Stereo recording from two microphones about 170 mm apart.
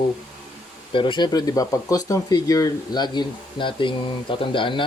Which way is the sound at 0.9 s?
30° left (ahead or behind).